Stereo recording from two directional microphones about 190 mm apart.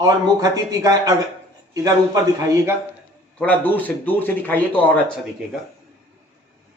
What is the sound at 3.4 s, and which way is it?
Speech, 10° left (ahead or behind).